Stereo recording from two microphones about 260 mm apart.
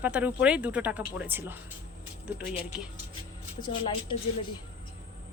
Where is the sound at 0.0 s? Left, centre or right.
Centre.